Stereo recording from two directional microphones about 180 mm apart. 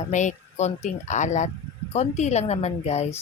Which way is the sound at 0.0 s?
40° left (ahead or behind).